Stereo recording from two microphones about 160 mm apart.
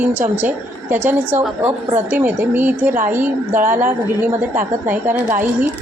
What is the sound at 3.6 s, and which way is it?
Speech, 55° right (ahead or behind).